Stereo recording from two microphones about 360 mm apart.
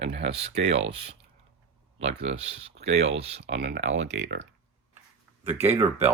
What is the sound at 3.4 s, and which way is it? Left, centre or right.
Speech, right.